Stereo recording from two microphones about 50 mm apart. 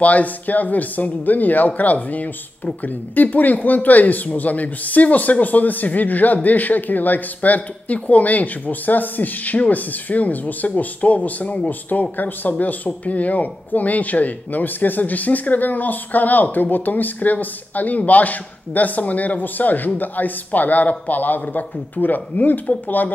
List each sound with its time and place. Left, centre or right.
0.0 s speech: left